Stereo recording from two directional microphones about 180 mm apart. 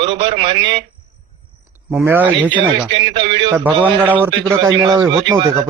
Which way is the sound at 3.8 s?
10° right (ahead or behind).